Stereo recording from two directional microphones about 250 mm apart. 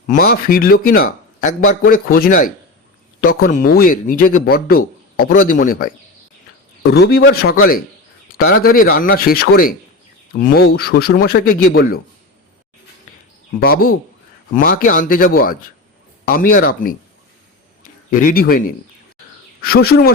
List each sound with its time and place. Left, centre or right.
0.1 s speech: left
6.9 s speech: left
8.6 s speech: left
13.6 s speech: left